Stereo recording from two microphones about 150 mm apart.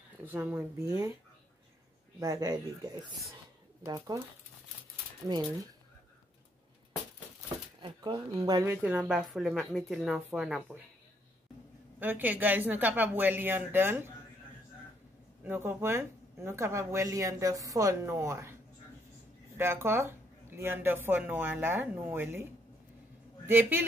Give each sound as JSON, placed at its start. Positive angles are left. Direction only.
{"t": 0.2, "sound": "speech", "side_deg": -10}
{"t": 2.1, "sound": "speech", "side_deg": -20}
{"t": 7.8, "sound": "speech", "side_deg": -40}
{"t": 8.4, "sound": "speech", "side_deg": -20}
{"t": 8.8, "sound": "speech", "side_deg": -10}
{"t": 12.0, "sound": "speech", "side_deg": -10}
{"t": 15.4, "sound": "speech", "side_deg": -15}